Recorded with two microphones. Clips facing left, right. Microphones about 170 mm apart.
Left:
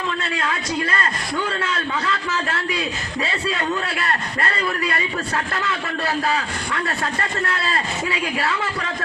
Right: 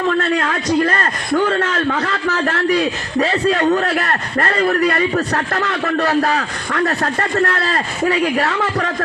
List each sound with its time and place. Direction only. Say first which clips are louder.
0.9 s a man's voice: right 6 dB; 50° right (ahead or behind)
3.7 s a man's voice: right 7 dB; 60° right (ahead or behind); by 9.0 s 45° right (ahead or behind)